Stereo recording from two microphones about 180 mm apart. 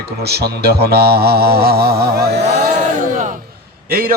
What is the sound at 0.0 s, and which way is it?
Mantra, 65° right (ahead or behind).